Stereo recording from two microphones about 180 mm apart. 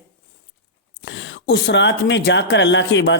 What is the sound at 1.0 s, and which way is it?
Speech, 90° left.